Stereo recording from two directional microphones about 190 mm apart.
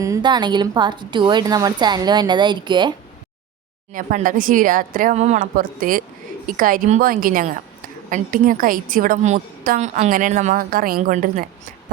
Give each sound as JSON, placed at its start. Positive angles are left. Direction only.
{"t": 0.0, "sound": "a woman's voice", "side_deg": -20}
{"t": 3.9, "sound": "a woman's voice", "side_deg": -45}